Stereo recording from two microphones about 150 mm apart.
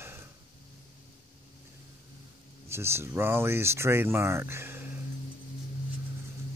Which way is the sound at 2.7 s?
15° right (ahead or behind).